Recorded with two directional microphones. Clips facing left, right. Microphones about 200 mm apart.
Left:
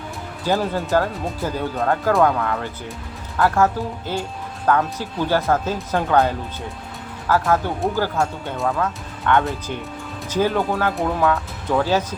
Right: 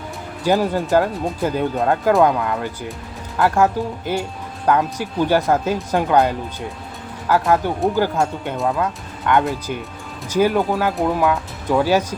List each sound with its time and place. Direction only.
0.4 s speech: 15° right (ahead or behind)